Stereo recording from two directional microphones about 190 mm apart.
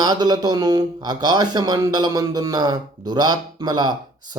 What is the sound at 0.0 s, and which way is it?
Speech, 20° right (ahead or behind).